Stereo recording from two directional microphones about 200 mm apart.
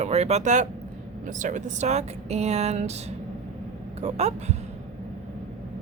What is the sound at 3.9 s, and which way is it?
Speech, 35° right (ahead or behind).